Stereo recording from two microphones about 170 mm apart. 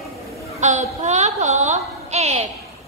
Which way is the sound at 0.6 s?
45° right (ahead or behind).